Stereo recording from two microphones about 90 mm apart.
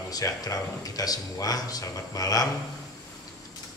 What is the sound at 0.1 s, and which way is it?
Speech, 40° left (ahead or behind).